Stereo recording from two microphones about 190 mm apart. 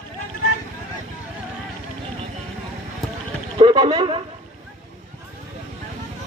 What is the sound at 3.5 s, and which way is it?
Speech, 25° right (ahead or behind).